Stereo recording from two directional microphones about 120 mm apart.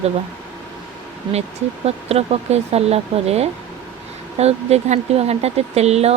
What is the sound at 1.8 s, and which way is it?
Speech, 60° right (ahead or behind).